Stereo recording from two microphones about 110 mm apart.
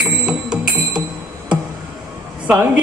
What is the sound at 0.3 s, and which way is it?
Music, 5° right (ahead or behind).